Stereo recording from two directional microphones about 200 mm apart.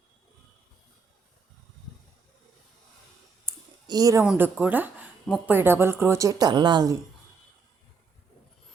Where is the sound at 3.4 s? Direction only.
20° right (ahead or behind).